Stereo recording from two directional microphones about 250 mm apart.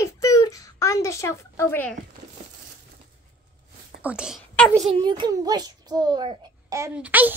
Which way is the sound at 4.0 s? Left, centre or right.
Centre.